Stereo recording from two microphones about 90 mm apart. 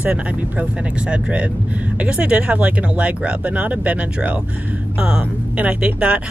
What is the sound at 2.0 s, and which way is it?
Speech, 10° right (ahead or behind).